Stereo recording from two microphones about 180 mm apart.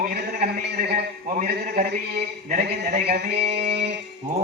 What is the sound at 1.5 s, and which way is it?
Music, 60° right (ahead or behind).